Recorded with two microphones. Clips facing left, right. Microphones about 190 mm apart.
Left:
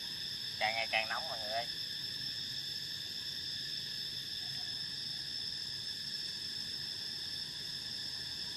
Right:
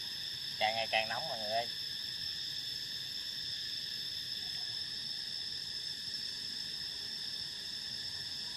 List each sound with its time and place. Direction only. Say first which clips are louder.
0.6 s speech: right 3 dB; 30° right (ahead or behind)